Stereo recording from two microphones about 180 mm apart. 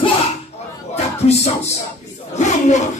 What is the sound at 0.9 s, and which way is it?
Music, 35° left (ahead or behind).